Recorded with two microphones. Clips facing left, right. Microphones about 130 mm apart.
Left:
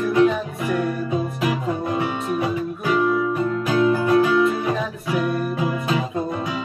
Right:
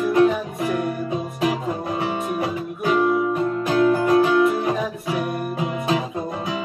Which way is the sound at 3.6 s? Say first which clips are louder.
Right 1 dB; 45° right (ahead or behind).